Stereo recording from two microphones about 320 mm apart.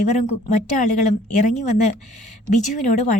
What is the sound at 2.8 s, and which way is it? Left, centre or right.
Speech, left.